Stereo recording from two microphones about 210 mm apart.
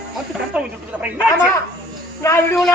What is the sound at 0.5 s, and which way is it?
Speech, 5° right (ahead or behind).